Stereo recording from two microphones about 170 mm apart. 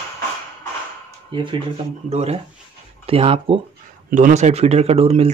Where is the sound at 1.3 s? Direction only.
30° right (ahead or behind).